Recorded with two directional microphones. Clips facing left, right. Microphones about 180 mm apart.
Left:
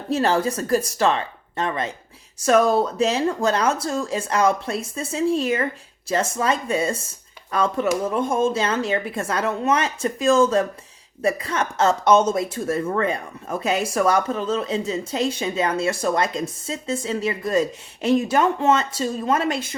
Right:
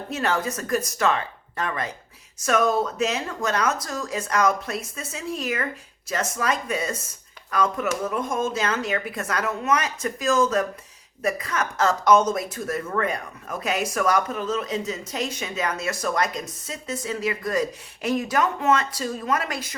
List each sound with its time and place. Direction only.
0.1 s speech: 30° left (ahead or behind)